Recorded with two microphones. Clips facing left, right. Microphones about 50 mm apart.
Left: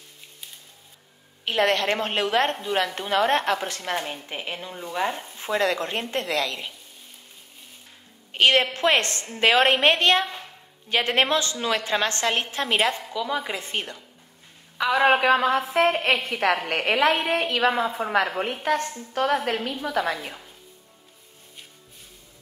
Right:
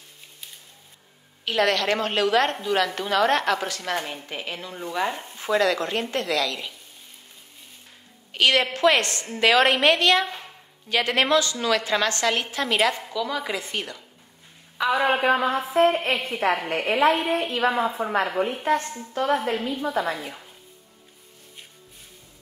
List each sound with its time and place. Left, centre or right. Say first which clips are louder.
1.4 s a woman's voice: even; left
5.6 s a woman's voice: right 1 dB; left
8.3 s a woman's voice: left 1 dB; left
14.9 s a woman's voice: left 2 dB; left